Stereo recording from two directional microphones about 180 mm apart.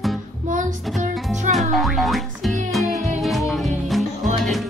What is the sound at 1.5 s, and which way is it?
Music, centre (ahead or behind).